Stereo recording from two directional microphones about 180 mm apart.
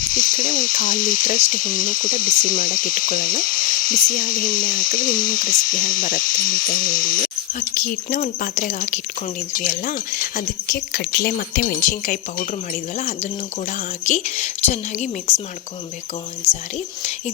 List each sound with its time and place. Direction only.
0.1 s speech: 50° left (ahead or behind)
13.7 s a woman's voice: 40° left (ahead or behind)
16.7 s a woman's voice: 40° left (ahead or behind)